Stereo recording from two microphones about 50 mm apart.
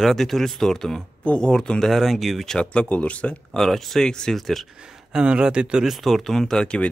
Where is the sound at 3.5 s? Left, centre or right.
Centre.